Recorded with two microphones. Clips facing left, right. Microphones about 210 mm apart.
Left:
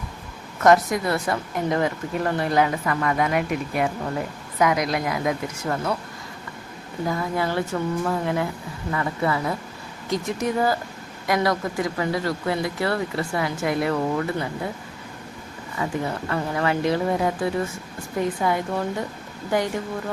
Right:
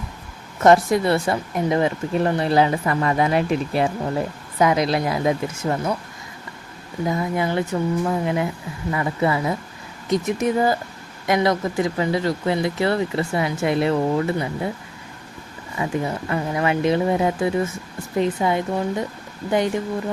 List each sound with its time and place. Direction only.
0.6 s speech: 30° right (ahead or behind)
7.1 s speech: 20° right (ahead or behind)
15.8 s speech: 25° right (ahead or behind)